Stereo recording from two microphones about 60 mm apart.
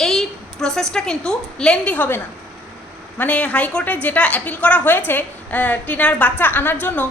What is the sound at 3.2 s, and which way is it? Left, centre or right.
A woman's voice, left.